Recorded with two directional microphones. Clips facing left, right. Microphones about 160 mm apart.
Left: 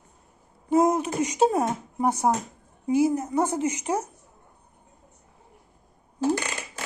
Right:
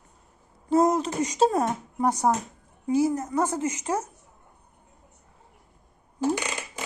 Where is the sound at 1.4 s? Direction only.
15° left (ahead or behind).